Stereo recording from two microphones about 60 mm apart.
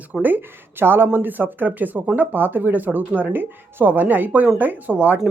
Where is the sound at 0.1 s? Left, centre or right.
Right.